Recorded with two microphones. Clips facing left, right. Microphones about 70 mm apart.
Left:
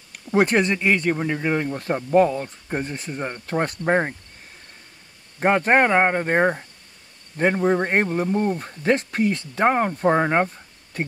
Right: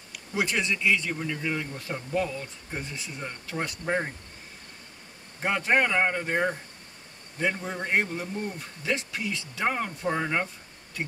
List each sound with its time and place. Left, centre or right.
0.1 s speech: left
5.4 s speech: left